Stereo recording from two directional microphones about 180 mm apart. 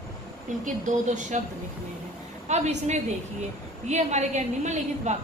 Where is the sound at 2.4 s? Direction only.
40° right (ahead or behind).